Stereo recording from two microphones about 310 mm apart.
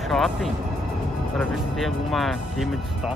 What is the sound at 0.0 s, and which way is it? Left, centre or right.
Speech, centre.